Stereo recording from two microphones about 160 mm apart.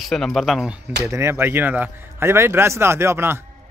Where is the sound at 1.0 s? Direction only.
20° right (ahead or behind).